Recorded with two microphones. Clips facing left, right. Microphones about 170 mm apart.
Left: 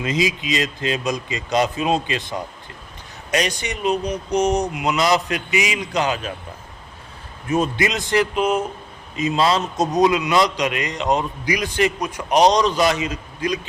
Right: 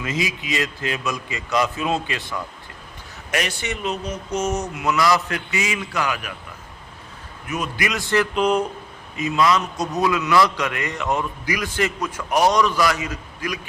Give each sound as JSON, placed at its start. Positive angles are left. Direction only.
{"t": 0.0, "sound": "a man's voice", "side_deg": 20}
{"t": 7.4, "sound": "a man's voice", "side_deg": 30}
{"t": 8.4, "sound": "speech", "side_deg": 5}
{"t": 9.1, "sound": "a man's voice", "side_deg": 25}